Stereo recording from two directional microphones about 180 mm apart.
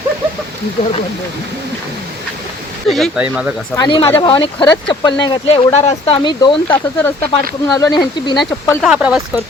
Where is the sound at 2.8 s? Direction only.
Centre (ahead or behind).